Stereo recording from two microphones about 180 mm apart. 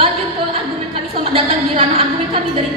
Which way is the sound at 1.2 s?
30° right (ahead or behind).